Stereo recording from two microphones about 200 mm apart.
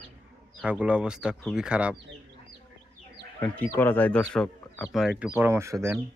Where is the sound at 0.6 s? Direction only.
5° right (ahead or behind).